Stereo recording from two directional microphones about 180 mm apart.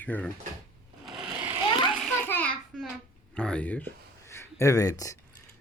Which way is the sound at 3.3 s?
5° left (ahead or behind).